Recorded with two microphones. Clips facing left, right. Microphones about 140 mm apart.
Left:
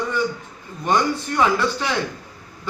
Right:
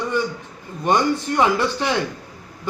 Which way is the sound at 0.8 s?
20° right (ahead or behind).